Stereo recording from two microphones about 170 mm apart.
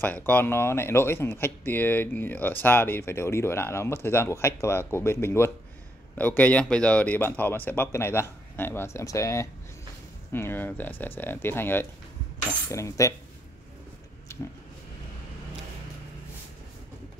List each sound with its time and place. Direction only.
0.0 s speech: 10° left (ahead or behind)